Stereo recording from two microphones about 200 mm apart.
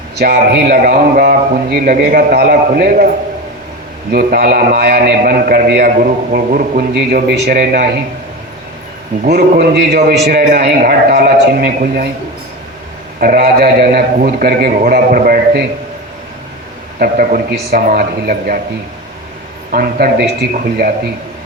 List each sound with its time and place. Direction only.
0.2 s a man's voice: 50° right (ahead or behind)
4.1 s a man's voice: 50° right (ahead or behind)
9.2 s a man's voice: 50° right (ahead or behind)
13.1 s a man's voice: 45° right (ahead or behind)
17.0 s a man's voice: 45° right (ahead or behind)
19.7 s a man's voice: 50° right (ahead or behind)